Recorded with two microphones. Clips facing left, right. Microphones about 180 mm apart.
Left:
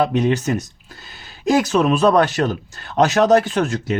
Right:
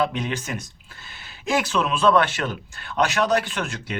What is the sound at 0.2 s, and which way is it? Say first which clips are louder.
Speech: left 10 dB; 40° left (ahead or behind).